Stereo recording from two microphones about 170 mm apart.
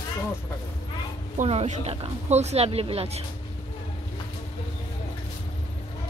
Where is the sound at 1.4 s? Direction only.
40° right (ahead or behind).